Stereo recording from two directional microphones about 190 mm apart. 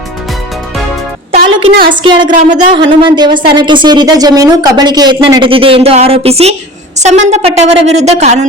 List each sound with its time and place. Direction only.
1.3 s music: 30° right (ahead or behind)
1.9 s a woman's voice: 25° right (ahead or behind)